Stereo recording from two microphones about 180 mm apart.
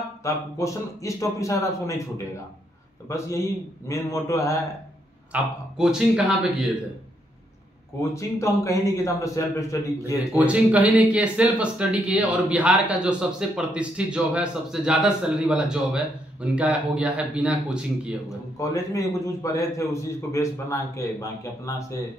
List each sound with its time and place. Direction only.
0.2 s a man's voice: 15° left (ahead or behind)
5.3 s speech: 5° right (ahead or behind)
8.0 s a man's voice: 15° left (ahead or behind)
10.3 s speech: 5° right (ahead or behind)
18.6 s a man's voice: 15° left (ahead or behind)